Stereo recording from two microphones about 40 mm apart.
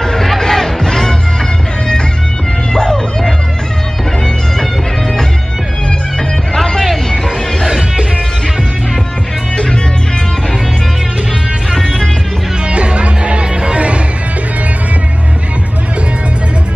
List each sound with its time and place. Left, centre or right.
0.0 s music: centre
2.7 s cat: centre
6.5 s music: centre
7.6 s music: centre
11.7 s music: centre
12.6 s music: right